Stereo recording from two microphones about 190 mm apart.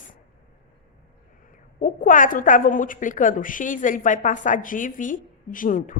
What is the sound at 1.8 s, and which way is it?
A woman's voice, 45° left (ahead or behind).